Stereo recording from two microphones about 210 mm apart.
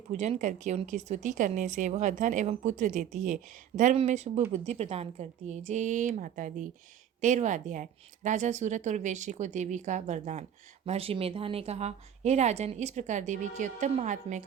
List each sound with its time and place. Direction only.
0.1 s a woman's voice: 35° right (ahead or behind)